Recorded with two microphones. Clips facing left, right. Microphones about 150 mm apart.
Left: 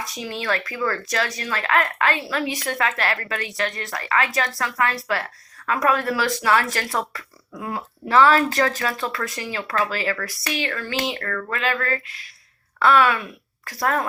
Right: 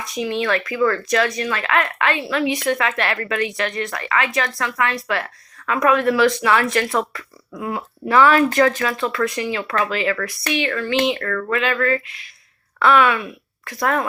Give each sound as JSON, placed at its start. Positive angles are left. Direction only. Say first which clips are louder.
{"t": 0.3, "sound": "speech", "louder": "right 5 dB", "side_deg": 35}